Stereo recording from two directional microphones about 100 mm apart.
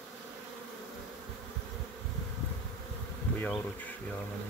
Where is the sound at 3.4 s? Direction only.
15° left (ahead or behind).